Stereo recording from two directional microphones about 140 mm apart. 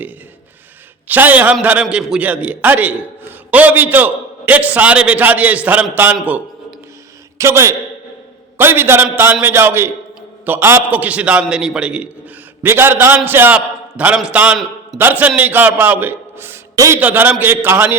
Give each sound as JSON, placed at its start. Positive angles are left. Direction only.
{"t": 1.0, "sound": "a man's voice", "side_deg": -15}
{"t": 6.2, "sound": "a sound", "side_deg": -10}
{"t": 7.3, "sound": "a man's voice", "side_deg": -20}